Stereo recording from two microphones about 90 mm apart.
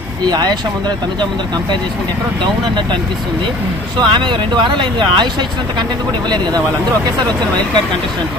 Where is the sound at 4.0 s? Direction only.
60° right (ahead or behind).